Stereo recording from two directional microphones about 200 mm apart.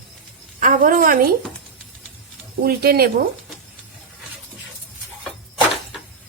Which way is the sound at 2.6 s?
50° right (ahead or behind).